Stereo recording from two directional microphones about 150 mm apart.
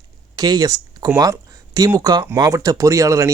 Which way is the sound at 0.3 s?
25° right (ahead or behind).